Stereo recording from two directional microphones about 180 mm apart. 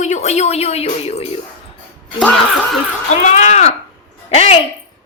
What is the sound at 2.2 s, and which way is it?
Speech, 5° left (ahead or behind).